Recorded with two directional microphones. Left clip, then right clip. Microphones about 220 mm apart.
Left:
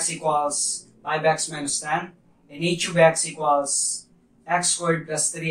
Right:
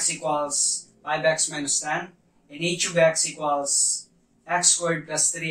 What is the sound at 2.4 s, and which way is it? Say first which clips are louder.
Speech: left 1 dB; 25° right (ahead or behind).